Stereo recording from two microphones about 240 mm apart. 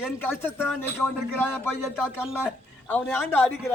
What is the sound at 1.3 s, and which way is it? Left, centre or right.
Speech, centre.